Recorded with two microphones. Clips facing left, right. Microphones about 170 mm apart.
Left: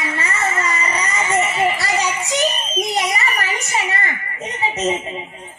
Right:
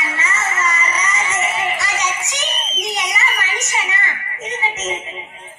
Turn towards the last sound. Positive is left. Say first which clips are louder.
# left 4 dB
turn(degrees=35)  # may be behind; listen again after turning